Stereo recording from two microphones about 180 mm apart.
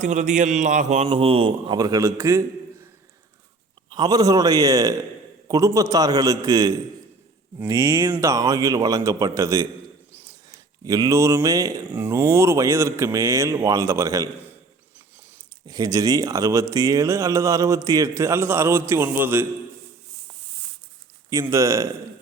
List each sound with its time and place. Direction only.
0.0 s a man's voice: 45° right (ahead or behind); by 2.4 s 15° right (ahead or behind)
3.8 s a man's voice: 25° right (ahead or behind)
15.6 s speech: 20° right (ahead or behind)
21.2 s speech: 15° right (ahead or behind)